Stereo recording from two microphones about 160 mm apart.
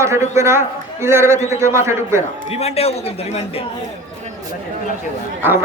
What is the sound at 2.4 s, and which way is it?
A man's voice, 40° left (ahead or behind).